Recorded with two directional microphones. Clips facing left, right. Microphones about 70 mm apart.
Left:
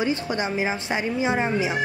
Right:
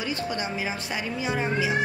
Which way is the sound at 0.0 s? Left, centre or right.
Left.